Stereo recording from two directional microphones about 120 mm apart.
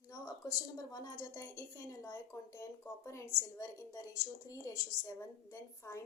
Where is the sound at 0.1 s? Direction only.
30° left (ahead or behind).